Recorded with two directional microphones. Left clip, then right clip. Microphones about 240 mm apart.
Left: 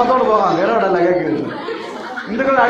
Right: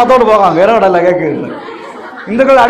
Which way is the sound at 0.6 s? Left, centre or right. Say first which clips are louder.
Right 8 dB; right.